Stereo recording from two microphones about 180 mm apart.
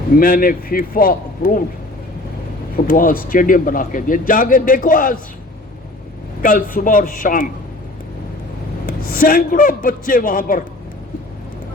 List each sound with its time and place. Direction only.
0.2 s a man's voice: 55° left (ahead or behind)
2.7 s a man's voice: 50° left (ahead or behind)
6.4 s a man's voice: 50° left (ahead or behind)
8.9 s a man's voice: 55° left (ahead or behind)